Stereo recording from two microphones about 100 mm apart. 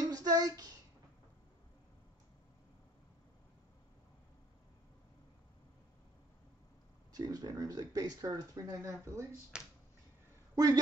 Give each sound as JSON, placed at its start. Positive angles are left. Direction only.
{"t": 0.0, "sound": "a sound", "side_deg": -40}
{"t": 7.1, "sound": "speech", "side_deg": -40}
{"t": 9.5, "sound": "speech", "side_deg": -5}
{"t": 10.5, "sound": "speech", "side_deg": -40}